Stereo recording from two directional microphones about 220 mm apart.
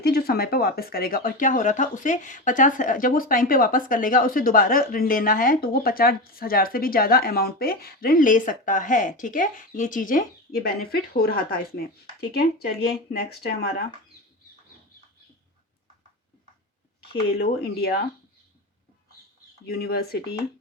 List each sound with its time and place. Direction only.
0.0 s speech: 45° left (ahead or behind)
17.3 s speech: 45° left (ahead or behind)
19.6 s speech: 45° left (ahead or behind)